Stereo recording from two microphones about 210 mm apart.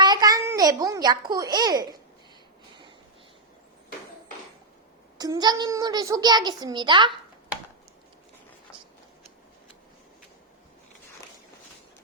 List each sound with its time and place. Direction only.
0.0 s a child's voice: 20° right (ahead or behind)
5.1 s a child's voice: 20° right (ahead or behind)